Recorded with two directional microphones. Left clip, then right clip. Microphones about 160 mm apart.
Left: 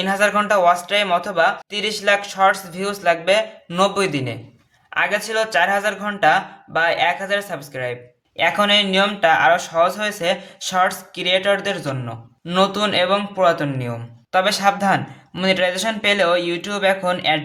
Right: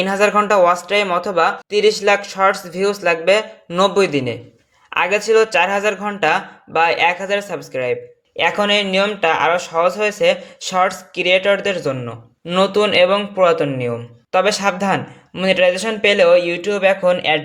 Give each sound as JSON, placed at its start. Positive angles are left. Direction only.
{"t": 0.0, "sound": "speech", "side_deg": -15}